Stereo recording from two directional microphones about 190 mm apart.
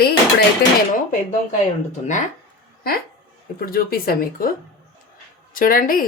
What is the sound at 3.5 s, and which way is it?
Speech, 50° left (ahead or behind).